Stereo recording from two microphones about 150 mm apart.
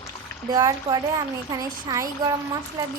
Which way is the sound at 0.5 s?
25° right (ahead or behind).